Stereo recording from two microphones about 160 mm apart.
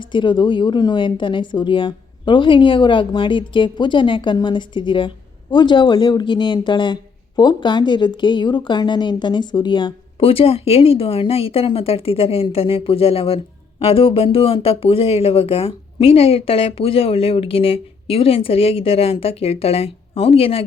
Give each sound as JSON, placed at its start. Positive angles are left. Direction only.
{"t": 0.0, "sound": "speech", "side_deg": 30}